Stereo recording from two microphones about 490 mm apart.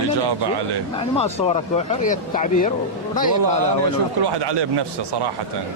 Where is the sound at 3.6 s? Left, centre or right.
Right.